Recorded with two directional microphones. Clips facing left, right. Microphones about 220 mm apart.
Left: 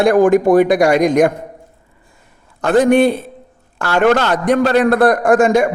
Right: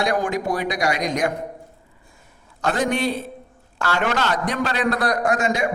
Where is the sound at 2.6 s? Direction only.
55° left (ahead or behind).